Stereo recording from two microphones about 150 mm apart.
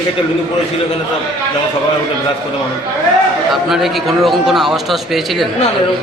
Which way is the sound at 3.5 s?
Centre (ahead or behind).